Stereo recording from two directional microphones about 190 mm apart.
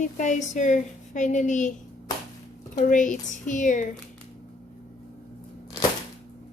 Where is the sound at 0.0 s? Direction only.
40° left (ahead or behind).